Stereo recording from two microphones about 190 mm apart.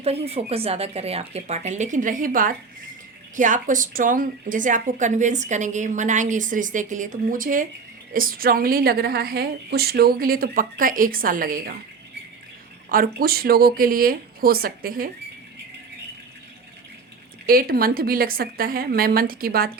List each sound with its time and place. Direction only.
0.0 s a woman's voice: 30° right (ahead or behind); by 11.8 s 50° right (ahead or behind)
12.9 s a woman's voice: 50° right (ahead or behind)
17.4 s a woman's voice: 50° right (ahead or behind)